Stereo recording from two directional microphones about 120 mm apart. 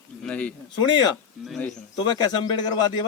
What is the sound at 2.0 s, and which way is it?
A man's voice, 35° left (ahead or behind).